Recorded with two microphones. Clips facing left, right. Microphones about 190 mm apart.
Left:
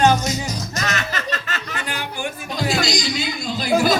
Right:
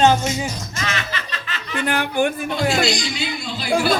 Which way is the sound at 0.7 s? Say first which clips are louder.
Left 2 dB; 45° left (ahead or behind).